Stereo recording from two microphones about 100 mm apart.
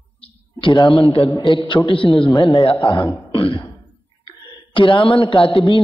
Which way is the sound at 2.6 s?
55° left (ahead or behind).